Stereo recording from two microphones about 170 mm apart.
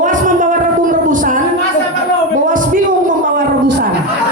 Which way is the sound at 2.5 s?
50° right (ahead or behind).